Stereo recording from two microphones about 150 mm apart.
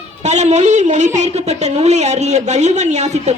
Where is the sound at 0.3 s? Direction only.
50° right (ahead or behind).